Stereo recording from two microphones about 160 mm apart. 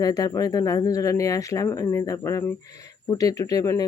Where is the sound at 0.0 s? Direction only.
20° left (ahead or behind).